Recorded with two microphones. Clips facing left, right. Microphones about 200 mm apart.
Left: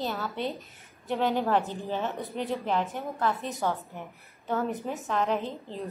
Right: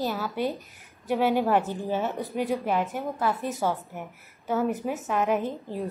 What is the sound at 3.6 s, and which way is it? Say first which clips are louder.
Speech: right 2 dB; 10° right (ahead or behind).